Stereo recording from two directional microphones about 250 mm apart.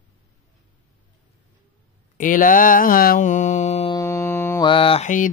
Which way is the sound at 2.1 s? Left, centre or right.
Left.